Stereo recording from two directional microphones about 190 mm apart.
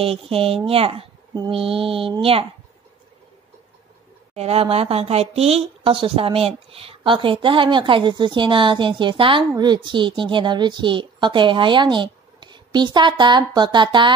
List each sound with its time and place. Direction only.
0.0 s speech: 30° right (ahead or behind)
4.4 s speech: 30° right (ahead or behind)